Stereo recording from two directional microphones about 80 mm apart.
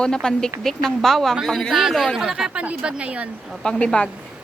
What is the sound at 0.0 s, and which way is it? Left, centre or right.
A woman's voice, centre.